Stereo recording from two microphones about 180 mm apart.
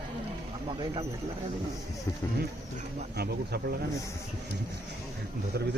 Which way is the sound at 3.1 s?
60° right (ahead or behind).